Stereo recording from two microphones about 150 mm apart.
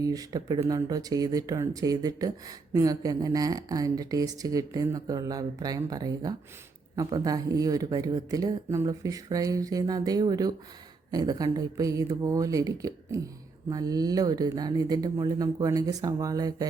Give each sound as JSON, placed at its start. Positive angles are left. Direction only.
{"t": 0.0, "sound": "speech", "side_deg": -25}